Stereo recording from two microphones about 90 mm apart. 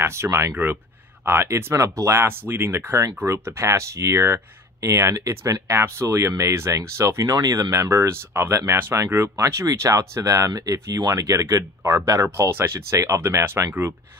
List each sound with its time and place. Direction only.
0.0 s speech: 30° right (ahead or behind)